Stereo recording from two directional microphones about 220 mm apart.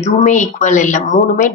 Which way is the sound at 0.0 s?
35° left (ahead or behind).